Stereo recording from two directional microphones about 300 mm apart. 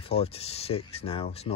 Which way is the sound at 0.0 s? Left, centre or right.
Centre.